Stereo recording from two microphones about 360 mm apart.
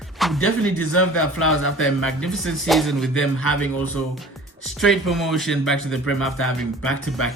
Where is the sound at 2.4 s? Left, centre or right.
Centre.